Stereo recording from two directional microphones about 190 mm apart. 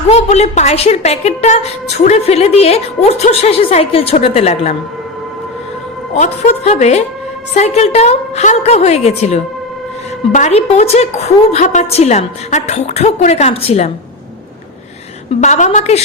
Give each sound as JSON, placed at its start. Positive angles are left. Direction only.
{"t": 0.1, "sound": "a woman's voice", "side_deg": 35}
{"t": 6.1, "sound": "a woman's voice", "side_deg": 40}
{"t": 15.4, "sound": "a woman's voice", "side_deg": 40}